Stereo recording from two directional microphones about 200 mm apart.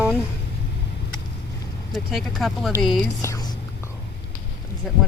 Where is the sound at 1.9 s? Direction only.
Centre (ahead or behind).